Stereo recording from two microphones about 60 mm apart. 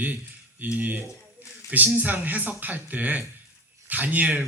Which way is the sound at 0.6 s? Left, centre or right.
Right.